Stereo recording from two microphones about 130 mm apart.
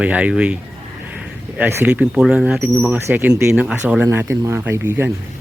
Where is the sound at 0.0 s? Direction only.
10° right (ahead or behind).